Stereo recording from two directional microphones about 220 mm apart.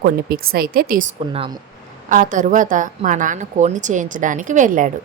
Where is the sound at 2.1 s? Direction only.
35° right (ahead or behind).